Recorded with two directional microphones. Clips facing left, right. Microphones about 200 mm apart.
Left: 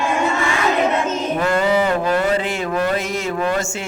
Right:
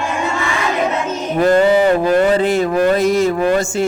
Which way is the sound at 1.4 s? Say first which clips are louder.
Right 7 dB; 35° right (ahead or behind).